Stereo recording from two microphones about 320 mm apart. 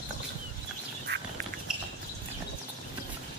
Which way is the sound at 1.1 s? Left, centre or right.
Right.